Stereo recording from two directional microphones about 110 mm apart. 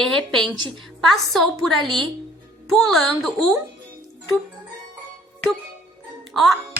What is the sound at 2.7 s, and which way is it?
Speech, centre (ahead or behind).